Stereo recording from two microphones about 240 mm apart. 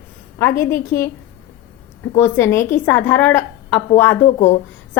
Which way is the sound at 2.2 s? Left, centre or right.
Centre.